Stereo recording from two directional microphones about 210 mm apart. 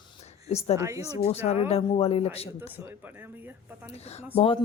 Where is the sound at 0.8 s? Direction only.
15° right (ahead or behind).